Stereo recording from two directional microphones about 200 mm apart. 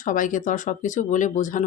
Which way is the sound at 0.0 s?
40° left (ahead or behind).